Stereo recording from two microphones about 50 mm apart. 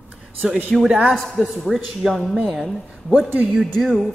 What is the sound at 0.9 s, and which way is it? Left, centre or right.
Speech, centre.